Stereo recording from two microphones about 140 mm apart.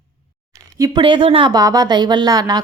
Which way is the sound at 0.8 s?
35° right (ahead or behind).